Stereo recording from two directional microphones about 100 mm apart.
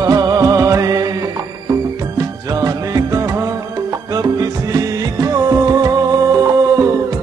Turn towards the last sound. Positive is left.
turn(degrees=-35)  # may be behind; listen again after turning